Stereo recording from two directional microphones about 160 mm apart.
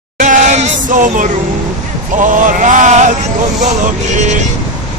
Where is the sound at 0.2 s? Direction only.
50° right (ahead or behind).